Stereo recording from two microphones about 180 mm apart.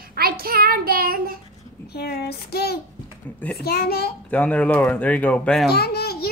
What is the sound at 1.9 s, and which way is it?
Child singing, 60° left (ahead or behind).